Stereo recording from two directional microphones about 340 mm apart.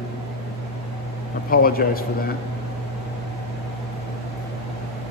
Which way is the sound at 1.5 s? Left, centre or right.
Left.